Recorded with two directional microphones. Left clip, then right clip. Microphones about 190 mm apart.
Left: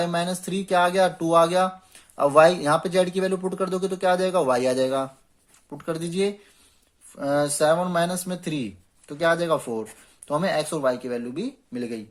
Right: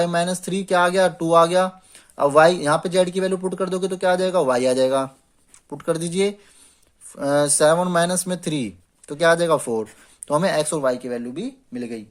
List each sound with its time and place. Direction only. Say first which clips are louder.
0.0 s speech: right 4 dB; 30° right (ahead or behind); by 12.0 s 10° right (ahead or behind)